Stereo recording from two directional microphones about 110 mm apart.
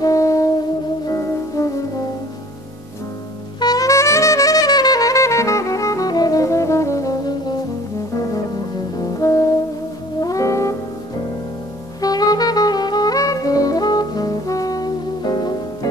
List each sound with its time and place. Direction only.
0.0 s brass instrument: 30° left (ahead or behind)
1.0 s music: 30° left (ahead or behind)
3.5 s saxophone: 35° left (ahead or behind)
8.9 s music: 30° left (ahead or behind)
12.0 s saxophone: 35° left (ahead or behind)